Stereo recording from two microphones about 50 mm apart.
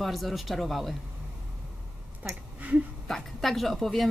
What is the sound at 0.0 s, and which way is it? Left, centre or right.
Speech, centre.